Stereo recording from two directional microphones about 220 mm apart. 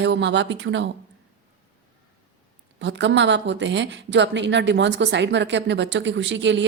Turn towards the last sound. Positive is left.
turn(degrees=-55)  # may be behind; listen again after turning